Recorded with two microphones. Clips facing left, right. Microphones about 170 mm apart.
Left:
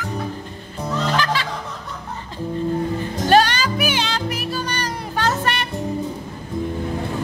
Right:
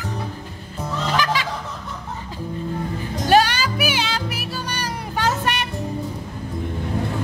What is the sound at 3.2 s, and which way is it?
Music, 10° right (ahead or behind).